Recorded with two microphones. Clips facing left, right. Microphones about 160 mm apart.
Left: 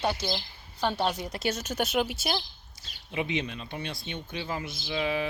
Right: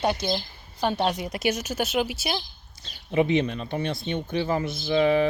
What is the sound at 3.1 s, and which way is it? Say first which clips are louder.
Speech: right 9 dB; 45° right (ahead or behind).